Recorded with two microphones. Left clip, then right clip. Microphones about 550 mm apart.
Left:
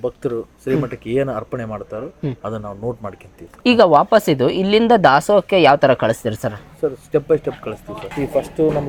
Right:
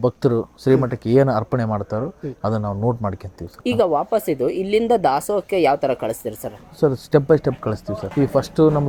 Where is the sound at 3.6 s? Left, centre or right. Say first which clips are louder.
Left 7 dB; centre.